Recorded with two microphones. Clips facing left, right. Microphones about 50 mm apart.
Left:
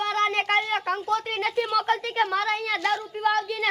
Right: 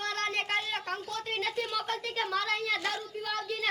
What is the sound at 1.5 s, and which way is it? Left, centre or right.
Speech, left.